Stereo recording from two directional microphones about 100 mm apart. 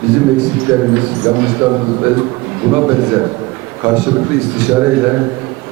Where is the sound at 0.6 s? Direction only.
20° right (ahead or behind).